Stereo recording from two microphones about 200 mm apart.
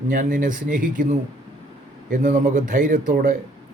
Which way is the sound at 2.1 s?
45° right (ahead or behind).